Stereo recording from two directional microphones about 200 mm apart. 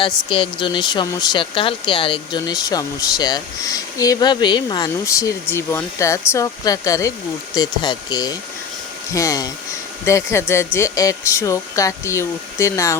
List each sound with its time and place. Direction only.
0.3 s speech: 25° left (ahead or behind)